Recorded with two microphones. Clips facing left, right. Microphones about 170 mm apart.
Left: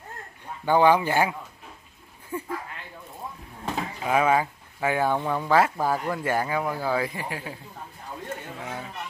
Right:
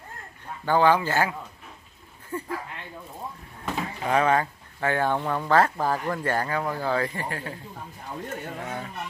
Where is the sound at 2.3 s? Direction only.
10° left (ahead or behind).